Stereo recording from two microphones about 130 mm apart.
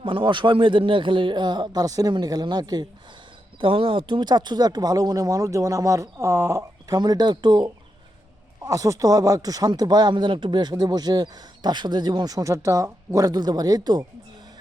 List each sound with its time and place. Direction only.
0.0 s speech: 40° right (ahead or behind)
3.6 s speech: 40° right (ahead or behind)